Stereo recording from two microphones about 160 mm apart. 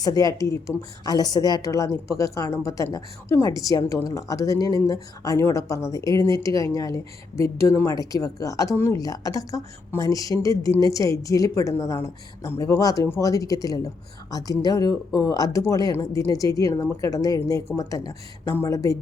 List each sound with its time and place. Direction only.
0.0 s a woman's voice: 25° left (ahead or behind)